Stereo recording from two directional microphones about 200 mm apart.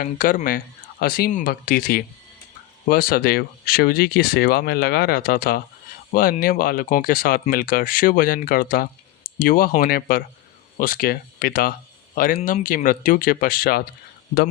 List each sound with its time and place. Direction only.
0.0 s speech: 45° left (ahead or behind)